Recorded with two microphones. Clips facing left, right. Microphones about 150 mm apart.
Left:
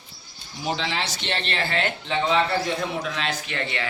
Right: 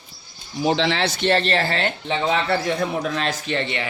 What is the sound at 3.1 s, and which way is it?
Speech, 40° right (ahead or behind).